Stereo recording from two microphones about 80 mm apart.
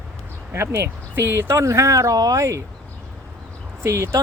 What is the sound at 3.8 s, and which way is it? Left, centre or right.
Speech, right.